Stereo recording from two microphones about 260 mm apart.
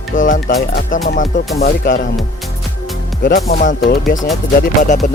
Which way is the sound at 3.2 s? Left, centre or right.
Left.